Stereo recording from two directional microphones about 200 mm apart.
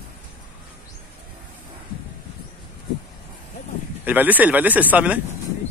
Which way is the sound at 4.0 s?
10° right (ahead or behind).